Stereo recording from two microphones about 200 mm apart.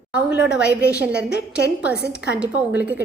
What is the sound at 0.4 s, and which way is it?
Speech, 5° right (ahead or behind).